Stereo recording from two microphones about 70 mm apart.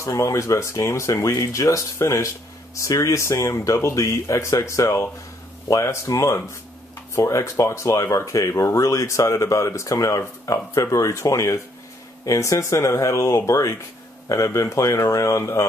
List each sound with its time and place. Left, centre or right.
0.0 s speech: left